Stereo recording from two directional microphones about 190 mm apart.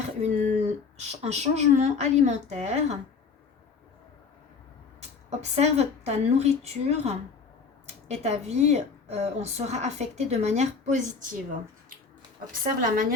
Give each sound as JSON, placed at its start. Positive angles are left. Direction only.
{"t": 0.2, "sound": "a woman's voice", "side_deg": -35}
{"t": 4.9, "sound": "a woman's voice", "side_deg": -35}
{"t": 12.8, "sound": "a woman's voice", "side_deg": -45}